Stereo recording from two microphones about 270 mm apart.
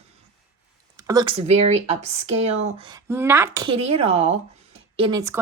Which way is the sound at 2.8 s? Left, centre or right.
Centre.